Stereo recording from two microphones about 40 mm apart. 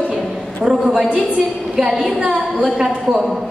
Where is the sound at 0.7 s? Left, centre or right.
Centre.